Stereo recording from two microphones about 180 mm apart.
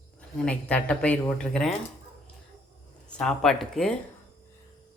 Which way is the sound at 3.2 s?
5° left (ahead or behind).